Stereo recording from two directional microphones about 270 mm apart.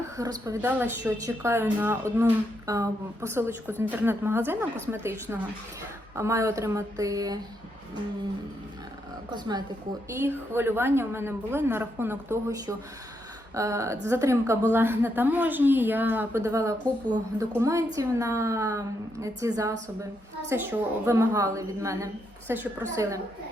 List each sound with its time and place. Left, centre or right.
0.2 s a woman's voice: centre
9.3 s a woman's voice: centre